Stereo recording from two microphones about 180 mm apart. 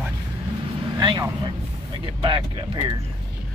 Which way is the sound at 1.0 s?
25° right (ahead or behind).